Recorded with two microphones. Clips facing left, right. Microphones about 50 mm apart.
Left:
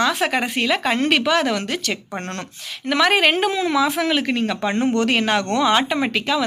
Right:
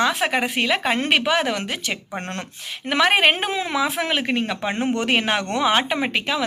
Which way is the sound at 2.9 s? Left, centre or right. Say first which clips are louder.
Left 1 dB; centre.